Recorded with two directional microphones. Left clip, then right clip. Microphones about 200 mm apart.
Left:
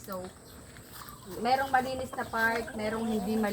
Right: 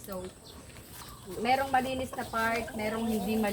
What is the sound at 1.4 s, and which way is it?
Speech, centre (ahead or behind).